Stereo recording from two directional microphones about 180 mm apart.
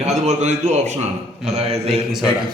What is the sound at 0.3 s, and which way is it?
A man's voice, 40° right (ahead or behind).